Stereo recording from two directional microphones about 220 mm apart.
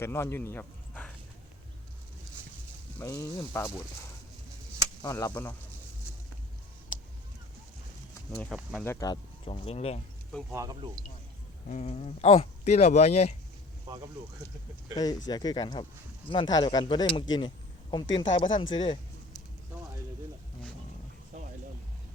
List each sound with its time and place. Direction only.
0.0 s speech: 10° left (ahead or behind)
3.0 s speech: 15° left (ahead or behind)
5.0 s speech: 15° left (ahead or behind)
8.4 s speech: centre (ahead or behind)
8.9 s speech: 15° left (ahead or behind)
10.5 s speech: 15° right (ahead or behind)
11.7 s speech: 30° left (ahead or behind)
14.9 s speech: 15° left (ahead or behind)
18.8 s a sound: 20° left (ahead or behind)